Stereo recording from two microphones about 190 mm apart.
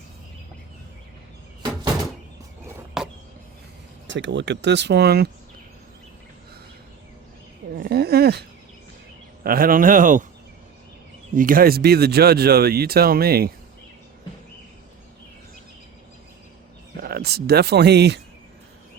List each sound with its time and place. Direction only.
3.0 s a sound: centre (ahead or behind)
4.0 s speech: 75° right (ahead or behind); by 5.3 s 55° right (ahead or behind)
7.8 s a sound: 55° right (ahead or behind)
9.4 s a man's voice: 50° right (ahead or behind)
11.3 s speech: 45° right (ahead or behind)
17.0 s speech: 55° right (ahead or behind)